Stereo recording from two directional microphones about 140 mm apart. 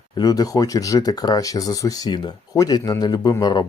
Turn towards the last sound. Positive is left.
turn(degrees=30)  # may be behind; listen again after turning